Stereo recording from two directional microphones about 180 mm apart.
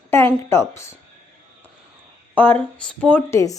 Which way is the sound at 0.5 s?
15° left (ahead or behind).